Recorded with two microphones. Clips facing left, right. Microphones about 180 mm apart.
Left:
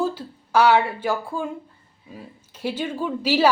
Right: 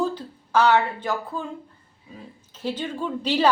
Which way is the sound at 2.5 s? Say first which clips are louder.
Left 2 dB; 10° left (ahead or behind).